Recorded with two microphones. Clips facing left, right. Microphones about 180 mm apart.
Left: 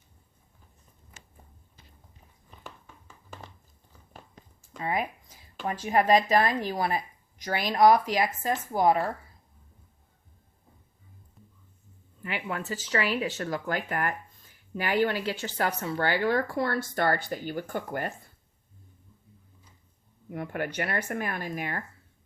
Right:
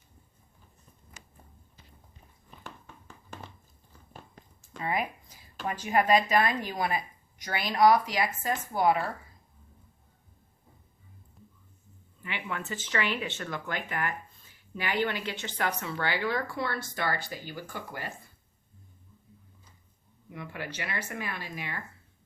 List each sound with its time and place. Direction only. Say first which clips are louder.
4.8 s speech: left 1 dB; 25° left (ahead or behind); by 9.0 s 40° left (ahead or behind)
12.2 s a woman's voice: left 3 dB; 40° left (ahead or behind)
20.3 s a woman's voice: left 7 dB; 50° left (ahead or behind)